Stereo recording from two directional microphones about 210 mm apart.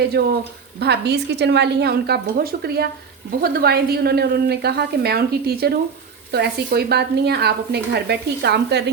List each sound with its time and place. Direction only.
0.1 s speech: 50° right (ahead or behind)